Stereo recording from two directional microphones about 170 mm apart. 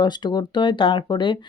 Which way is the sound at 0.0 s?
25° left (ahead or behind).